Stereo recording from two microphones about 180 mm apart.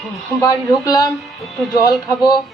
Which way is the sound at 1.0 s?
Centre (ahead or behind).